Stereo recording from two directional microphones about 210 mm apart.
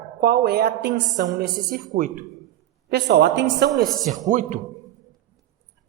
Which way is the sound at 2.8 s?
50° right (ahead or behind).